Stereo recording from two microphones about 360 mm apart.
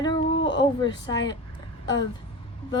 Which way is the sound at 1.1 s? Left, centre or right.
Left.